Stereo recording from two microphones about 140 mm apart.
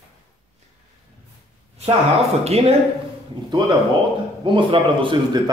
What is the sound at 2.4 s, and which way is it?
Speech, 50° right (ahead or behind).